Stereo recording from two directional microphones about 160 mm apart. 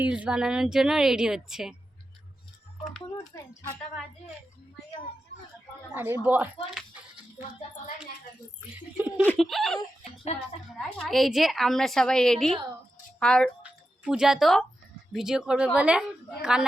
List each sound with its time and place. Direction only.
0.0 s a woman's voice: 10° right (ahead or behind)
3.3 s speech: 20° left (ahead or behind)
5.9 s a woman's voice: 15° right (ahead or behind)
6.7 s music: 10° right (ahead or behind)
9.0 s a woman's voice: 10° right (ahead or behind)
9.2 s a woman's voice: 5° left (ahead or behind)
13.6 s music: 5° right (ahead or behind)
15.1 s a woman's voice: 5° right (ahead or behind)